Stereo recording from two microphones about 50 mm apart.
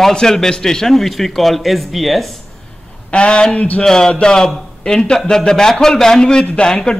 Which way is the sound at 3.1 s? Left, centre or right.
Centre.